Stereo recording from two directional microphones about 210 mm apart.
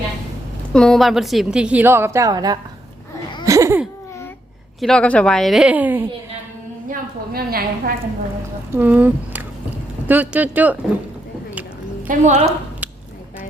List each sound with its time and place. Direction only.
0.7 s a woman's voice: 5° left (ahead or behind); by 2.6 s 15° right (ahead or behind)
3.4 s a sound: 15° right (ahead or behind)
4.8 s a woman's voice: 5° left (ahead or behind)
6.9 s a woman's voice: 45° right (ahead or behind)
8.7 s speech: 10° right (ahead or behind)
12.0 s a woman's voice: 35° right (ahead or behind)